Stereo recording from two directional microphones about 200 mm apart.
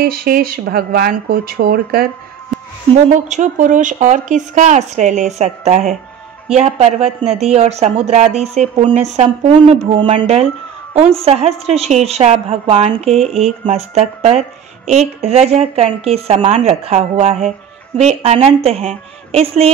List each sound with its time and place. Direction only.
0.0 s speech: 50° right (ahead or behind)
3.3 s speech: 40° right (ahead or behind)